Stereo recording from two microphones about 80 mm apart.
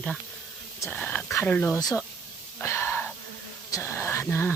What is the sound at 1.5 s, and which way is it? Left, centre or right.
Speech, left.